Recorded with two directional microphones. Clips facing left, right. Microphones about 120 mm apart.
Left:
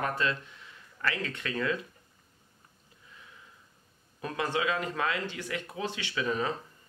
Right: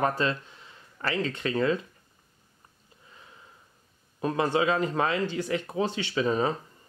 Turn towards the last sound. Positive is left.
turn(degrees=-30)  # may be behind; listen again after turning